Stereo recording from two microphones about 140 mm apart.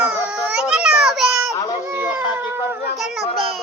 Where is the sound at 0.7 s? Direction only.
5° right (ahead or behind).